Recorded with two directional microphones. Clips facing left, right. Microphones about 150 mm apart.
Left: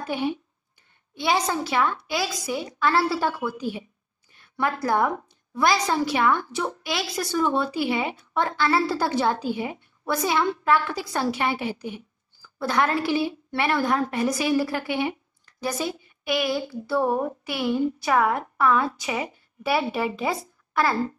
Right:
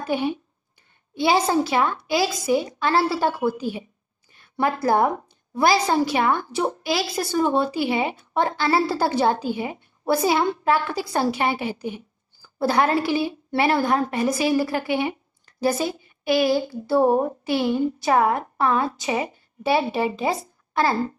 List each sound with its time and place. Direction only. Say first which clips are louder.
0.1 s a woman's voice: right 3 dB; 30° right (ahead or behind)